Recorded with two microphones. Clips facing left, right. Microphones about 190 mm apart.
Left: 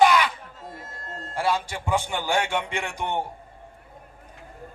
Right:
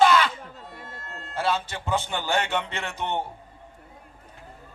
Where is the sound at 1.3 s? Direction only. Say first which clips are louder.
Left 1 dB; 10° left (ahead or behind).